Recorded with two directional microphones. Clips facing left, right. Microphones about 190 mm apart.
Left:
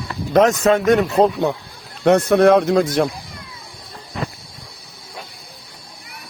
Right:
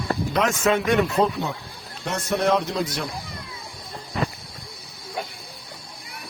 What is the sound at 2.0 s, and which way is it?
A man's voice, 60° left (ahead or behind).